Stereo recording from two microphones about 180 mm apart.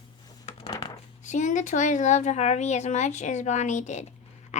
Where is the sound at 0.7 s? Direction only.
40° left (ahead or behind).